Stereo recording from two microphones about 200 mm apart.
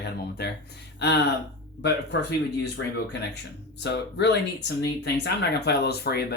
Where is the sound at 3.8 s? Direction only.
60° left (ahead or behind).